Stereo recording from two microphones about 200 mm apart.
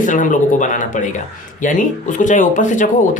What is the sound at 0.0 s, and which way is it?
Speech, 40° left (ahead or behind).